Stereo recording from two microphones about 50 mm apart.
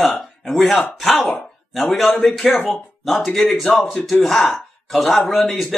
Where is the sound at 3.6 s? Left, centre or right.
Left.